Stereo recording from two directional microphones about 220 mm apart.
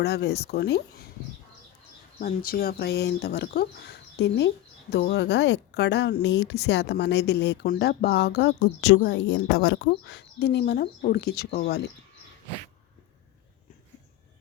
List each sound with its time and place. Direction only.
0.0 s speech: 50° left (ahead or behind)
2.2 s speech: 40° left (ahead or behind); by 9.8 s 60° left (ahead or behind)
9.8 s speech: 50° left (ahead or behind)